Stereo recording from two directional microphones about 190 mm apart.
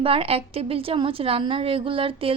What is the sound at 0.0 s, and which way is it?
A woman's voice, 30° right (ahead or behind).